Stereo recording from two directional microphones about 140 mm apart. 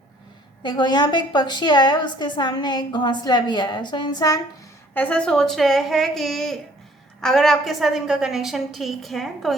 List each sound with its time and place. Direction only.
0.6 s a woman's voice: 30° left (ahead or behind)
4.9 s a woman's voice: 10° left (ahead or behind)